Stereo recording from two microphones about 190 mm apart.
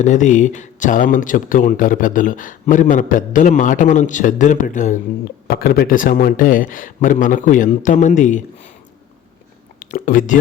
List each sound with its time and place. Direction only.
0.0 s speech: 40° left (ahead or behind)
5.5 s speech: 55° left (ahead or behind); by 8.7 s 40° left (ahead or behind)
9.8 s speech: 45° left (ahead or behind)